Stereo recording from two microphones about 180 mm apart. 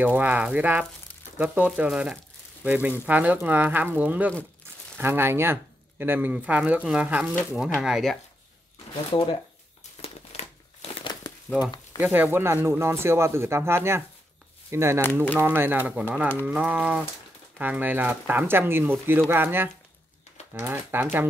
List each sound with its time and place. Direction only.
0.0 s speech: 10° right (ahead or behind)
9.1 s speech: 25° left (ahead or behind)
10.0 s crumpling: 35° left (ahead or behind)
11.6 s speech: 5° right (ahead or behind)